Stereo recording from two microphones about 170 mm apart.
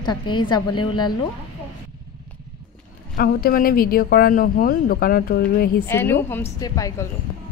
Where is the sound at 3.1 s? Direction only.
60° left (ahead or behind).